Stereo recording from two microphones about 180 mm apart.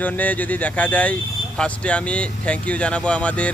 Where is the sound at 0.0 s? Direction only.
10° left (ahead or behind).